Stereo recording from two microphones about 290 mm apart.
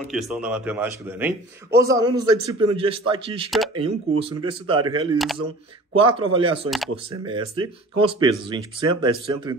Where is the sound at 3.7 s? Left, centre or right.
Centre.